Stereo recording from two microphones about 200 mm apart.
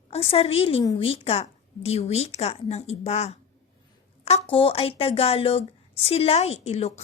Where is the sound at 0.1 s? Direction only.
30° left (ahead or behind).